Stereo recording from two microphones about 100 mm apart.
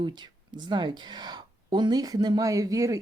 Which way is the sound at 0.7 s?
50° right (ahead or behind).